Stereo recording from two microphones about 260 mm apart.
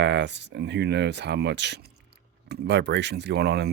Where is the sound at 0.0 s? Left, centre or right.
Right.